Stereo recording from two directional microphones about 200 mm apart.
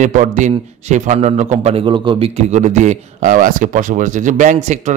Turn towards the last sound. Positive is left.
turn(degrees=-35)  # may be behind; listen again after turning